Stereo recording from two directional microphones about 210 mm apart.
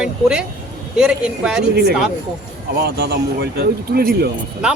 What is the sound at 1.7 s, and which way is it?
A man's voice, 50° right (ahead or behind).